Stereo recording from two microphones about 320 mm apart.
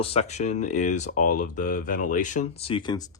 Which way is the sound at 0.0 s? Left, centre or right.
Centre.